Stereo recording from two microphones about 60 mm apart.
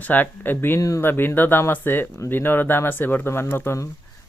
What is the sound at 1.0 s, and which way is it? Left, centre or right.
Speech, left.